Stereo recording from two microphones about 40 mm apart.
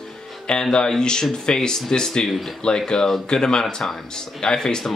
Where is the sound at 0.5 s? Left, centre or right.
Centre.